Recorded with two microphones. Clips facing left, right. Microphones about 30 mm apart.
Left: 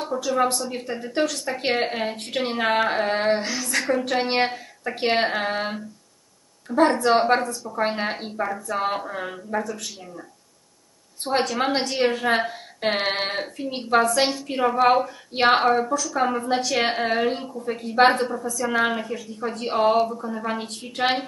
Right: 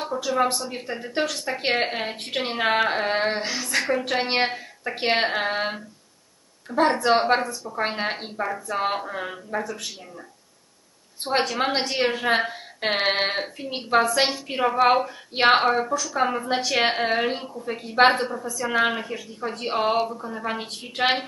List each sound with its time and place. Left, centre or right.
0.0 s a woman's voice: centre
11.2 s a woman's voice: centre